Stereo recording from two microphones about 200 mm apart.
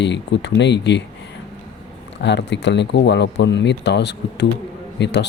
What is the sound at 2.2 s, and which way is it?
Speech, 60° left (ahead or behind).